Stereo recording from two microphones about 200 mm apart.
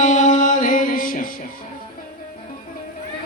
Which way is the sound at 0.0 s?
35° left (ahead or behind).